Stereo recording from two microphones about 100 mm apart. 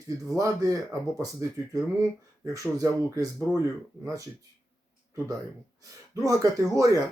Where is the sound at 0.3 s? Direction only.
35° right (ahead or behind).